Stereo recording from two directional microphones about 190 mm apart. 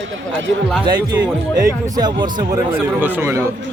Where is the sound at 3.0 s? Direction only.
10° right (ahead or behind).